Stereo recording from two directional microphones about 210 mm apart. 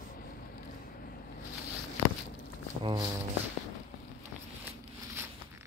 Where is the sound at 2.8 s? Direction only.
20° right (ahead or behind).